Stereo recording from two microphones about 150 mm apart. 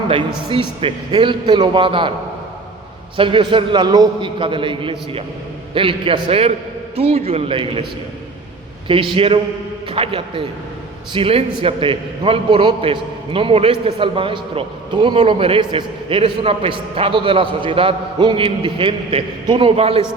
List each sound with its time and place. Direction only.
0.1 s a man's voice: 35° right (ahead or behind)
3.2 s a man's voice: 35° right (ahead or behind)
8.9 s a man's voice: 35° right (ahead or behind)